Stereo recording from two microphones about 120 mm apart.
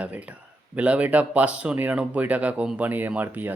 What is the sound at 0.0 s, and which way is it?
Speech, 10° right (ahead or behind).